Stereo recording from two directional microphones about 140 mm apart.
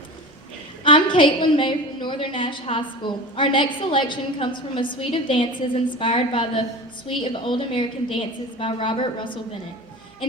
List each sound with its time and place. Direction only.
0.9 s a woman's voice: 35° left (ahead or behind)